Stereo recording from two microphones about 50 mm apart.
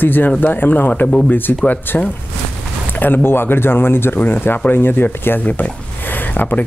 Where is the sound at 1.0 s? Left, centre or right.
Left.